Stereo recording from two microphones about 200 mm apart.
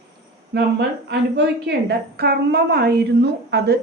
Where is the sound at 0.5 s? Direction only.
55° right (ahead or behind).